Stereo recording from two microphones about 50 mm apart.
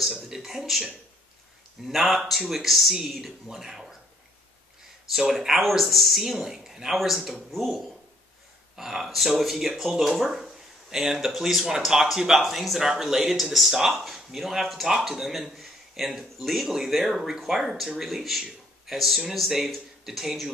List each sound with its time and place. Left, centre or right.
0.1 s a sound: centre
1.8 s speech: centre
5.3 s speech: centre